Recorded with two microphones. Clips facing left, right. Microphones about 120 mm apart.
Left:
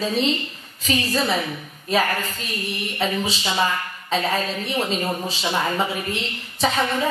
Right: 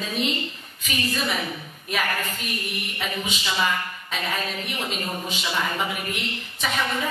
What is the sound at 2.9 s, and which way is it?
Speech, 35° left (ahead or behind).